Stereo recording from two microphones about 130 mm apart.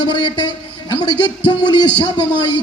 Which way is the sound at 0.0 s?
40° left (ahead or behind).